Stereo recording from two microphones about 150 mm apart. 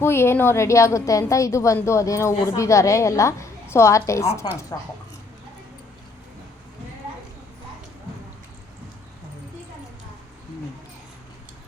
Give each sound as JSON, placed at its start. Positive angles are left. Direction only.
{"t": 0.0, "sound": "a woman's voice", "side_deg": 15}